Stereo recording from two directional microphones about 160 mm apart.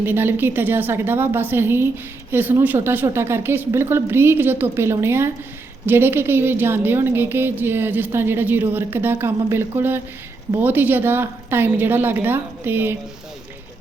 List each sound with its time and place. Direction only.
0.0 s a woman's voice: 15° right (ahead or behind)